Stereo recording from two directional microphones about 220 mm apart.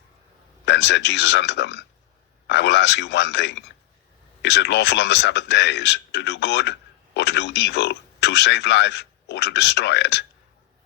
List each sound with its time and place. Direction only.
0.6 s a man's voice: 50° left (ahead or behind)